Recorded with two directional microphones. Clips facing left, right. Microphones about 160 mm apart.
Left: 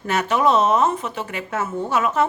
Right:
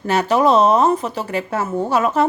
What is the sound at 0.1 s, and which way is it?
A woman's voice, 35° right (ahead or behind).